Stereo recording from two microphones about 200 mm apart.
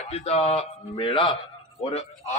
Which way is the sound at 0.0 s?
30° left (ahead or behind).